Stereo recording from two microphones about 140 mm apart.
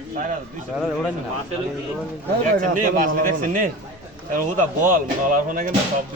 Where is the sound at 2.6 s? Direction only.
75° right (ahead or behind).